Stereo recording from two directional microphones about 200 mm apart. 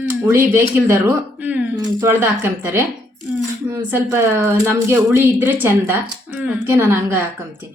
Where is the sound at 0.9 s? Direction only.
10° right (ahead or behind).